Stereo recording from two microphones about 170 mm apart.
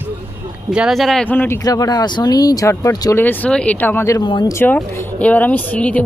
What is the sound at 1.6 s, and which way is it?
Speech, 20° left (ahead or behind).